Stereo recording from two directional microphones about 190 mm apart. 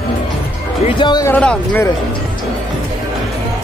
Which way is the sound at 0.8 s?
25° left (ahead or behind).